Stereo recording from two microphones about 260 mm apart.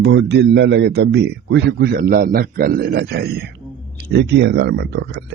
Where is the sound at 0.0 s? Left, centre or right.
Right.